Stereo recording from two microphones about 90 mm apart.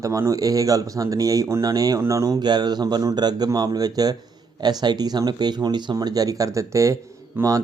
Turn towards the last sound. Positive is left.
turn(degrees=-25)  # may be behind; listen again after turning